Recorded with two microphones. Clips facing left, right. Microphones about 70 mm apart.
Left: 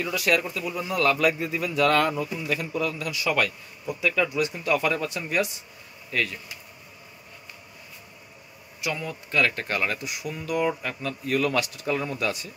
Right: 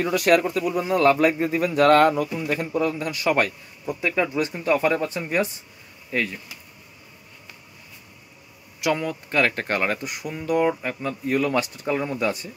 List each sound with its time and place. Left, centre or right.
0.0 s speech: right
2.4 s speech: right
8.8 s speech: right
10.7 s speech: right
12.3 s speech: right